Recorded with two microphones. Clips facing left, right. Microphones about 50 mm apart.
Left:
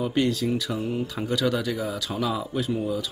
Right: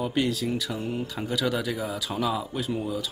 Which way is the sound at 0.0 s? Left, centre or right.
Centre.